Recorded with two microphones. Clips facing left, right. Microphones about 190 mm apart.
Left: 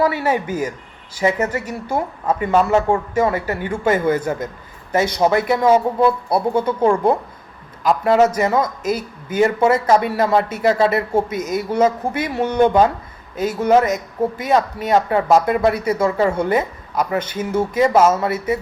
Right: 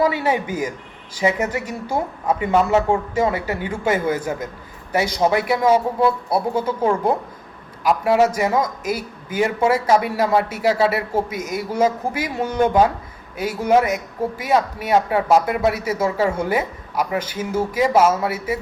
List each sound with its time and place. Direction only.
0.0 s speech: 15° right (ahead or behind)